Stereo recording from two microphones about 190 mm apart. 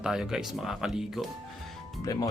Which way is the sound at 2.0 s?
20° left (ahead or behind).